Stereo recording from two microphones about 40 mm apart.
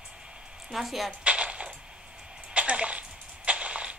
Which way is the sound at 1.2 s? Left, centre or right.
Right.